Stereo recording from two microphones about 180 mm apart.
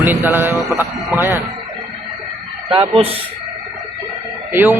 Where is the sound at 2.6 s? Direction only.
30° right (ahead or behind).